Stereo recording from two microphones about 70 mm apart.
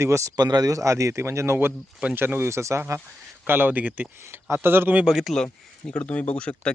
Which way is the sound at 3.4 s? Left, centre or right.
Right.